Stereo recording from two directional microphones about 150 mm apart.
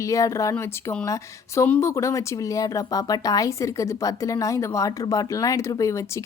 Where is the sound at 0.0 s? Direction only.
20° left (ahead or behind).